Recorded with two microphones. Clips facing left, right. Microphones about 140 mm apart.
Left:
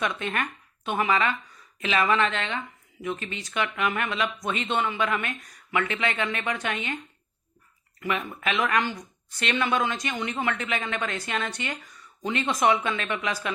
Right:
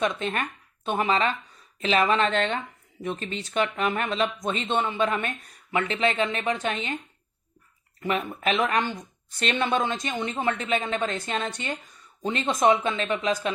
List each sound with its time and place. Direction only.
0.2 s speech: 25° right (ahead or behind)
8.0 s speech: 30° right (ahead or behind)
9.4 s speech: 35° right (ahead or behind)
12.2 s speech: 30° right (ahead or behind)